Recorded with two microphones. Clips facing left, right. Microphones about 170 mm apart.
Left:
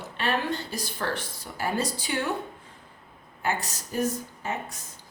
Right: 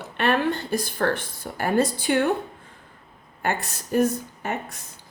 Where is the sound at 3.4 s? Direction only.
55° right (ahead or behind).